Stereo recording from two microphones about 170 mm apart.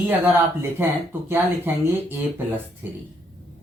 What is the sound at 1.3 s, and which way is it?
Speech, 15° right (ahead or behind).